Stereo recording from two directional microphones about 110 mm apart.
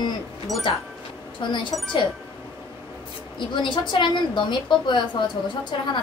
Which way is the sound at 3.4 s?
50° left (ahead or behind).